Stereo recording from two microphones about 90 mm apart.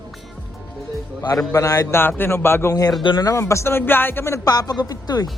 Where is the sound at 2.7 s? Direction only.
45° left (ahead or behind); by 4.4 s 25° left (ahead or behind).